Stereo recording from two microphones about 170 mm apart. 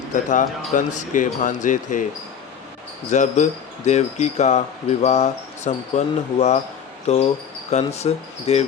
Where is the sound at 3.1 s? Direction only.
45° left (ahead or behind).